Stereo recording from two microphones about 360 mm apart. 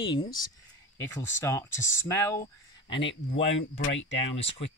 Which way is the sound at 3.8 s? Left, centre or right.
Left.